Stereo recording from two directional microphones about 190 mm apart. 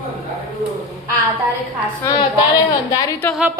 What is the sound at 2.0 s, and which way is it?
A woman's voice, 20° left (ahead or behind).